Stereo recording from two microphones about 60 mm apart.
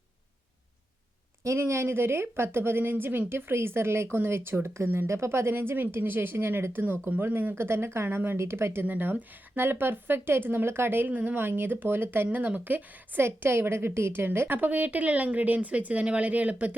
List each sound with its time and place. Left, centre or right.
1.5 s speech: right
7.5 s speech: right
13.2 s a woman's voice: right